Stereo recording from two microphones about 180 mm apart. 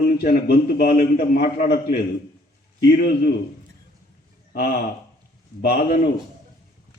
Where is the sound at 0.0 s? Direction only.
60° left (ahead or behind).